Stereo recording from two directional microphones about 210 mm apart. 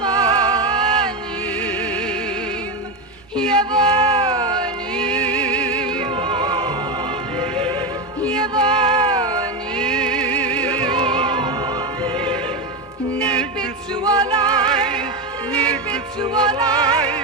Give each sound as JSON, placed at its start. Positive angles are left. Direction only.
{"t": 0.0, "sound": "music", "side_deg": -20}
{"t": 3.6, "sound": "music", "side_deg": -20}
{"t": 4.9, "sound": "music", "side_deg": 5}
{"t": 6.1, "sound": "music", "side_deg": -25}
{"t": 9.7, "sound": "music", "side_deg": 5}
{"t": 10.8, "sound": "music", "side_deg": -25}
{"t": 13.1, "sound": "music", "side_deg": 5}
{"t": 14.0, "sound": "music", "side_deg": -20}
{"t": 16.2, "sound": "music", "side_deg": -20}